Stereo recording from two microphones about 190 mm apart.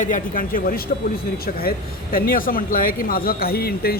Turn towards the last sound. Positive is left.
turn(degrees=55)  # may be behind; listen again after turning